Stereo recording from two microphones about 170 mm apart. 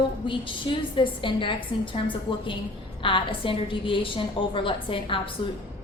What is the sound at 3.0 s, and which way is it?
A woman's voice, 30° left (ahead or behind).